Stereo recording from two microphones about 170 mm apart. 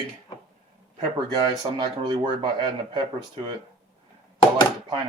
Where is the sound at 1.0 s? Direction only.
25° right (ahead or behind).